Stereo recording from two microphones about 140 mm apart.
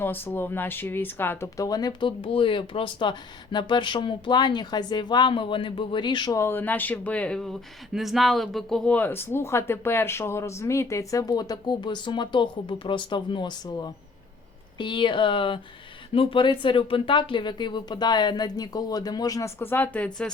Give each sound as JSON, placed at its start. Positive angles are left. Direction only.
{"t": 0.0, "sound": "speech", "side_deg": 15}
{"t": 19.5, "sound": "speech", "side_deg": 15}